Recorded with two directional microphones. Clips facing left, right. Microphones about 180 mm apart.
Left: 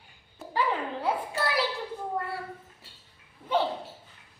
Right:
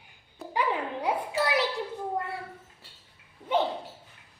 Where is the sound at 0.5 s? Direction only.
15° right (ahead or behind).